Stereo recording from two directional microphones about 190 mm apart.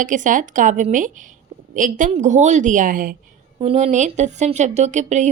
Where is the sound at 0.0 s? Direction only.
40° right (ahead or behind).